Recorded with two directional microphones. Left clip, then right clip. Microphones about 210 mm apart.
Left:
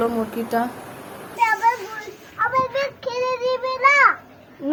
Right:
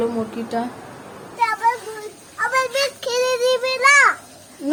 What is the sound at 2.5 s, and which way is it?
Child singing, 15° right (ahead or behind).